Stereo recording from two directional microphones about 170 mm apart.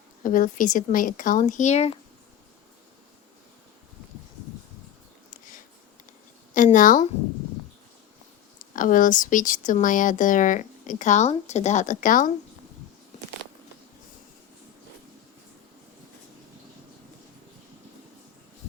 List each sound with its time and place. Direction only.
0.2 s speech: 50° left (ahead or behind)
6.5 s a woman's voice: 50° left (ahead or behind)
8.7 s speech: 50° left (ahead or behind)